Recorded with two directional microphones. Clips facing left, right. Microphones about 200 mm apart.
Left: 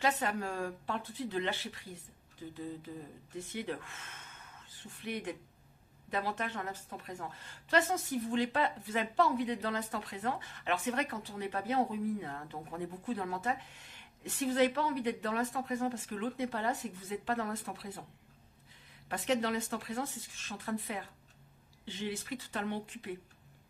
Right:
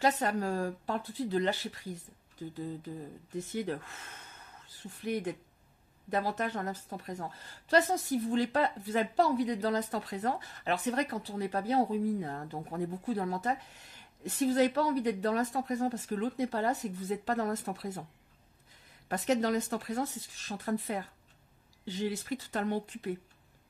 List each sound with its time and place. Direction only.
0.0 s a woman's voice: 40° right (ahead or behind)
3.3 s a woman's voice: 40° right (ahead or behind)
19.0 s a woman's voice: 40° right (ahead or behind)